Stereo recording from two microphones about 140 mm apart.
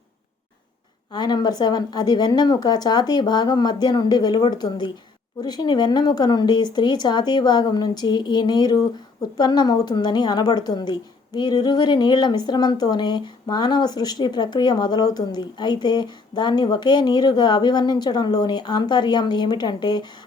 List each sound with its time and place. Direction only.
1.1 s a woman's voice: 30° left (ahead or behind)